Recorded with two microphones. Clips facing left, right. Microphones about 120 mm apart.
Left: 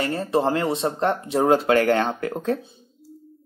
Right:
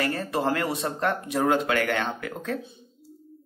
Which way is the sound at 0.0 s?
25° left (ahead or behind).